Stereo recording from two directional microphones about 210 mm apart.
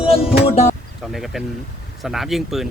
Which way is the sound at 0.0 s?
25° left (ahead or behind).